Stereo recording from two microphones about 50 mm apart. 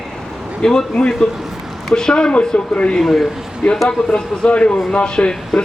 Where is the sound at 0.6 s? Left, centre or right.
Centre.